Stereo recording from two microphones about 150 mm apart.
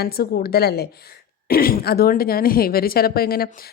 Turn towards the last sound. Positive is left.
turn(degrees=90)